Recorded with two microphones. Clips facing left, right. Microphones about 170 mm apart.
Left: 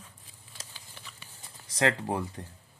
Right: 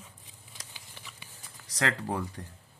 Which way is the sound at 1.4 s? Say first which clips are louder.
Left 4 dB; 25° left (ahead or behind).